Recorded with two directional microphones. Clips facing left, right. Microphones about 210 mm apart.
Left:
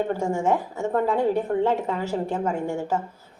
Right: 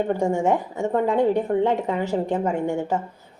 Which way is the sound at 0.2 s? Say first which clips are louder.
Right 2 dB; 15° right (ahead or behind).